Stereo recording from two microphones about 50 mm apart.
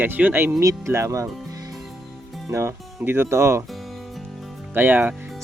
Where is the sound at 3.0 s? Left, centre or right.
Right.